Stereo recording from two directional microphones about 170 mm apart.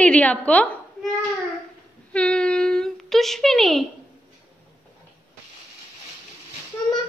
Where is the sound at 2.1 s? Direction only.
5° left (ahead or behind).